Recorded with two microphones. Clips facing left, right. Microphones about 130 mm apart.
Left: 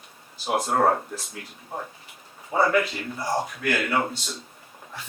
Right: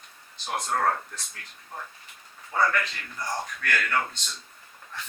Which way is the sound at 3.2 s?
25° left (ahead or behind).